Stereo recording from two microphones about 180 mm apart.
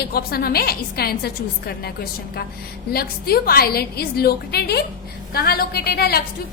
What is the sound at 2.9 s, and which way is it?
A woman's voice, 55° left (ahead or behind).